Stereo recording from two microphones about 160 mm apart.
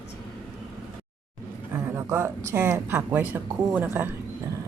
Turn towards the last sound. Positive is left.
turn(degrees=-15)  # may be behind; listen again after turning